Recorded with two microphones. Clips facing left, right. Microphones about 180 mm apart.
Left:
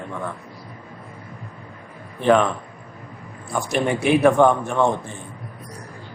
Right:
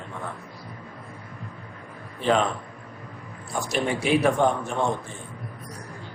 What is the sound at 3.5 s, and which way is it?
A man's voice, 55° left (ahead or behind).